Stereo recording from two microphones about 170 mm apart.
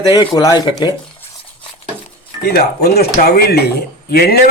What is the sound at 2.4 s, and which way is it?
A man's voice, 65° left (ahead or behind).